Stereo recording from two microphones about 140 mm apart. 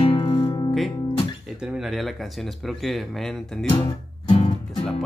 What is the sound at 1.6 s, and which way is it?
Speech, 5° right (ahead or behind).